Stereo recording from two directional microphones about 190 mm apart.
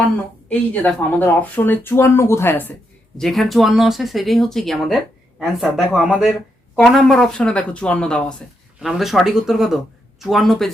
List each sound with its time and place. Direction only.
0.5 s speech: 10° left (ahead or behind)